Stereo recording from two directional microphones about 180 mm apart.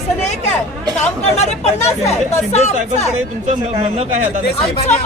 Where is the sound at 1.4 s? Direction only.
35° left (ahead or behind).